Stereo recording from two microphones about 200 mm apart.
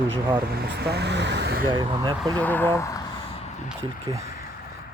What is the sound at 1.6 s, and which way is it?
Speech, 25° right (ahead or behind).